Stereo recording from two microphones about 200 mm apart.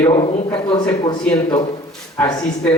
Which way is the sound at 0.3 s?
35° left (ahead or behind).